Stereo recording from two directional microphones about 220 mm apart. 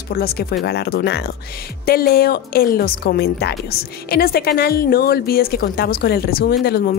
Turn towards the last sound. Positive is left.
turn(degrees=45)  # may be behind; listen again after turning